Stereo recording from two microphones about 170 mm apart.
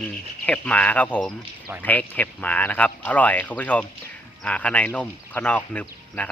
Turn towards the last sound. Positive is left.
turn(degrees=10)  # may be behind; listen again after turning